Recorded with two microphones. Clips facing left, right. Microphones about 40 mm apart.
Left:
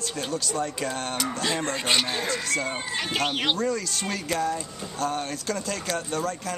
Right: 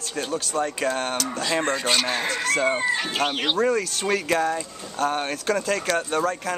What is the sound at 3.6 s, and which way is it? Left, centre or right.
Speech, right.